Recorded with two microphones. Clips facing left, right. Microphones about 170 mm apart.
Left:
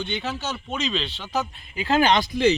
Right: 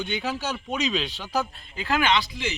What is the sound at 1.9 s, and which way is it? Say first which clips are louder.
Speech: left 4 dB; 40° left (ahead or behind).